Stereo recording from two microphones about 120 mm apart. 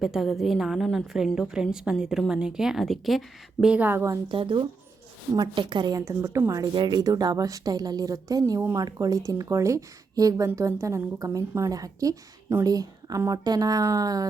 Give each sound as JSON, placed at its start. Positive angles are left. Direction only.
{"t": 0.0, "sound": "a woman's voice", "side_deg": 0}
{"t": 4.3, "sound": "a woman's voice", "side_deg": -40}
{"t": 6.7, "sound": "a woman's voice", "side_deg": -40}